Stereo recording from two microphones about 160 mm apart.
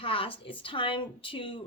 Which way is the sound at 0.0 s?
35° left (ahead or behind).